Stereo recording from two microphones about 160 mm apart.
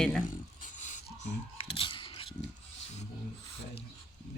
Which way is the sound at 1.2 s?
35° left (ahead or behind).